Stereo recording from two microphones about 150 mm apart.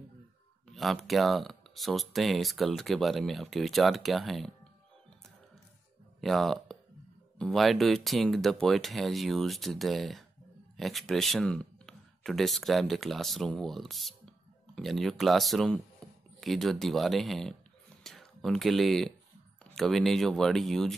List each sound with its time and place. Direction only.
0.7 s speech: centre (ahead or behind)
6.2 s speech: centre (ahead or behind)
16.0 s a sound: 5° left (ahead or behind)
16.3 s speech: centre (ahead or behind)